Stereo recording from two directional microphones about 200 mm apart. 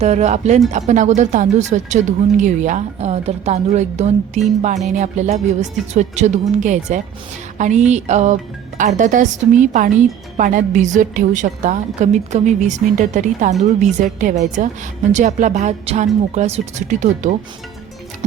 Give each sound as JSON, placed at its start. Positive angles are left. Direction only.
{"t": 0.0, "sound": "speech", "side_deg": -35}